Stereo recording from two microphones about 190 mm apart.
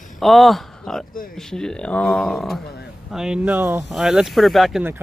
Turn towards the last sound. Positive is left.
turn(degrees=0)  # may be behind; listen again after turning